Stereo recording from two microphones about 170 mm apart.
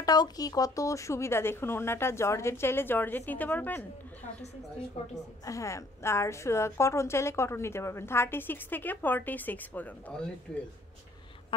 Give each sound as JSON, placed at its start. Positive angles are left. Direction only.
{"t": 0.0, "sound": "a woman's voice", "side_deg": 20}
{"t": 5.4, "sound": "a woman's voice", "side_deg": 20}